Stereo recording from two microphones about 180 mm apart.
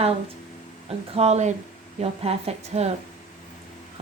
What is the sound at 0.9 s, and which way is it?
A woman's voice, 35° right (ahead or behind).